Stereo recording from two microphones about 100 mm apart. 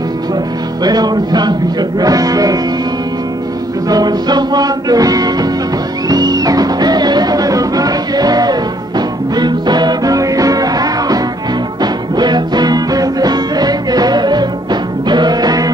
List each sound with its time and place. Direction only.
0.8 s speech: 45° right (ahead or behind)
3.9 s speech: 40° right (ahead or behind)
6.0 s music: 40° right (ahead or behind)